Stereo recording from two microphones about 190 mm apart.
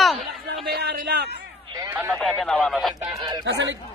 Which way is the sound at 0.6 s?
60° right (ahead or behind).